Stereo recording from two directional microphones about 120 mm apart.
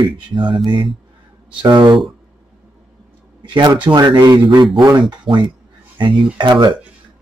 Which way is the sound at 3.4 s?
40° right (ahead or behind).